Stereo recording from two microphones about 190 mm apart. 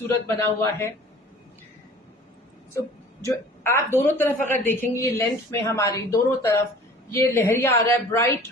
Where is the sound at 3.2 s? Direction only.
15° left (ahead or behind).